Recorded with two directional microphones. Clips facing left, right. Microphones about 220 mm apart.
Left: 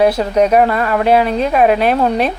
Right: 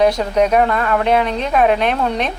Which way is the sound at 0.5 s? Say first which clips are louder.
Left 3 dB; 5° left (ahead or behind).